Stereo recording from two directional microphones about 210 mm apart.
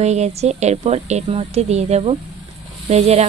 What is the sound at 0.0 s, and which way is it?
A woman's voice, 30° right (ahead or behind).